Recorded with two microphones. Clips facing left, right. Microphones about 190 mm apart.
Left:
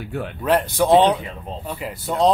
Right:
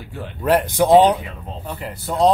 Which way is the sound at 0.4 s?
10° right (ahead or behind).